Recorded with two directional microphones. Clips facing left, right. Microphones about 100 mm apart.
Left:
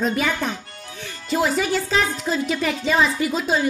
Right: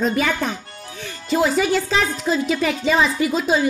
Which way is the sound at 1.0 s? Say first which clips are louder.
Right 3 dB; centre (ahead or behind).